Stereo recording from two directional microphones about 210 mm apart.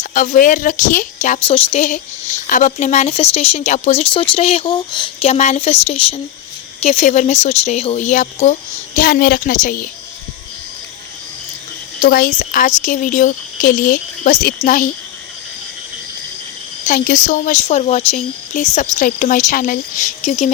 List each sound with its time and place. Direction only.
0.1 s a woman's voice: 40° left (ahead or behind)
9.0 s a woman's voice: 45° left (ahead or behind)
11.9 s a woman's voice: 45° left (ahead or behind)
16.8 s a woman's voice: 40° left (ahead or behind)